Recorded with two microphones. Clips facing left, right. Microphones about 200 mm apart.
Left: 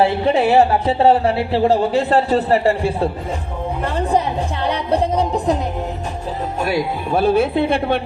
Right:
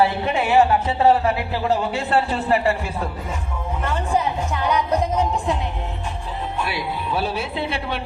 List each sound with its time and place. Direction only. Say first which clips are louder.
0.0 s a woman's voice: left 5 dB; 30° left (ahead or behind)
6.6 s speech: left 8 dB; 45° left (ahead or behind)